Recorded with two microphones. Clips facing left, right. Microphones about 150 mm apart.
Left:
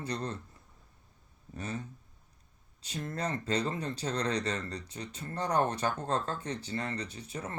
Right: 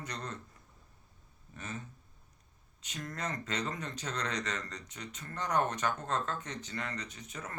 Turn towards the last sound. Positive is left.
turn(degrees=30)  # may be behind; listen again after turning